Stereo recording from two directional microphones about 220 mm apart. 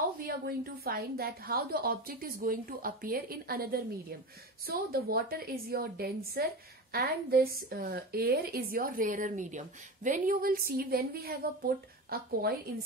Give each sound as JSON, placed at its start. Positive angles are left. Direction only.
{"t": 0.2, "sound": "a woman's voice", "side_deg": -45}